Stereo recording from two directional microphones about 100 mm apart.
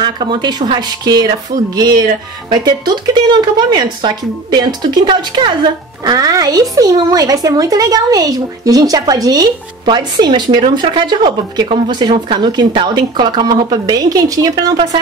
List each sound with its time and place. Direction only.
0.0 s speech: 50° right (ahead or behind)
2.6 s speech: 45° right (ahead or behind)
6.0 s speech: 35° right (ahead or behind)
9.8 s speech: 50° right (ahead or behind)